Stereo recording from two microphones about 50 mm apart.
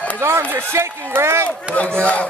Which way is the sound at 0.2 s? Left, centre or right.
Right.